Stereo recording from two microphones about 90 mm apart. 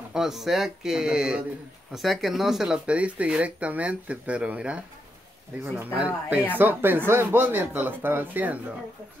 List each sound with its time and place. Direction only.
0.1 s speech: 5° right (ahead or behind)
5.9 s speech: 15° right (ahead or behind)